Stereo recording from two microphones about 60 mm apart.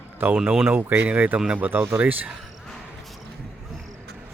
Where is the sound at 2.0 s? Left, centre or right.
Right.